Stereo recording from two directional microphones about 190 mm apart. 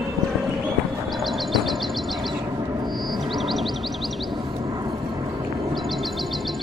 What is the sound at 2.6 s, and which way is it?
Music, 20° right (ahead or behind).